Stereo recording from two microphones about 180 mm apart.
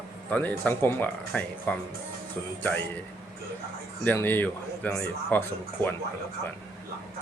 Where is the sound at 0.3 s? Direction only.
10° left (ahead or behind).